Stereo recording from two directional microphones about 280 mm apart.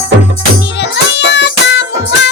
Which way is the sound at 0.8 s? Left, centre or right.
Left.